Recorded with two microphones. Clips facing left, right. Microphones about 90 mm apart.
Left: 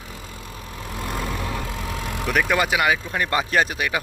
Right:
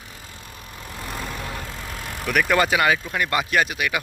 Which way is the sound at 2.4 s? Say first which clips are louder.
Right 2 dB; 15° left (ahead or behind).